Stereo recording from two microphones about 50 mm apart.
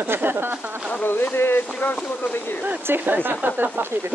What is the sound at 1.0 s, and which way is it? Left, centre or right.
Speech, left.